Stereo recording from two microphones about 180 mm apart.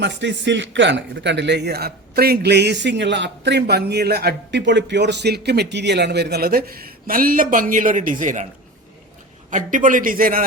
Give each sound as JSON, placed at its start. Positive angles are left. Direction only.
{"t": 0.0, "sound": "a man's voice", "side_deg": -80}
{"t": 9.5, "sound": "a man's voice", "side_deg": -45}